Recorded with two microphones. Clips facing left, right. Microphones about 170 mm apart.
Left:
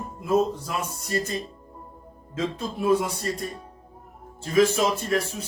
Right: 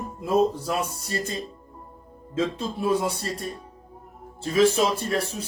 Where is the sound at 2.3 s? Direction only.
30° right (ahead or behind).